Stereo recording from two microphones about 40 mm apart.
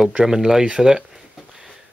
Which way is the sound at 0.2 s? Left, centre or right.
Centre.